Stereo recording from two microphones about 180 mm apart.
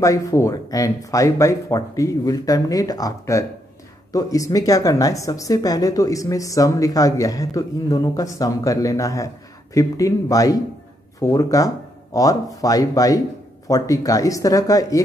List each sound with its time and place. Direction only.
0.0 s speech: 15° left (ahead or behind)